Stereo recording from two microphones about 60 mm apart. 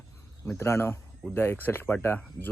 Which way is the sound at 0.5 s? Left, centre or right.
Left.